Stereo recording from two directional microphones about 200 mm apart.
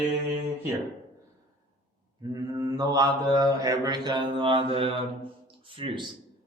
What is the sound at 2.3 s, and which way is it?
A man's voice, 15° right (ahead or behind).